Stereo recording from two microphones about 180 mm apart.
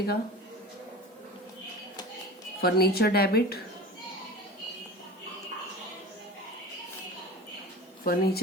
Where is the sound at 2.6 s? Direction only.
60° left (ahead or behind).